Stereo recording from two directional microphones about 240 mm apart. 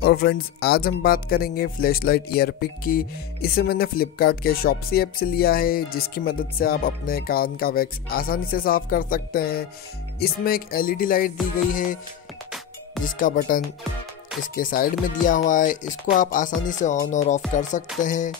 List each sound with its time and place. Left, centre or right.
0.0 s speech: left
13.0 s speech: left